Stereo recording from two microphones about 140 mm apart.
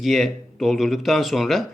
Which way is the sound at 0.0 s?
Centre (ahead or behind).